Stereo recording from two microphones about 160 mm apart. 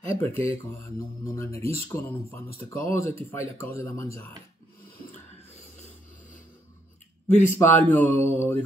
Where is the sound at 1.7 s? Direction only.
15° left (ahead or behind).